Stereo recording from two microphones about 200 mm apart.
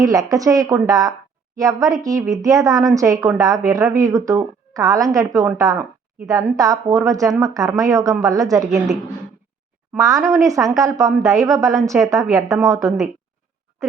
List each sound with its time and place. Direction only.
0.0 s a woman's voice: 15° right (ahead or behind)
10.0 s a woman's voice: 15° right (ahead or behind)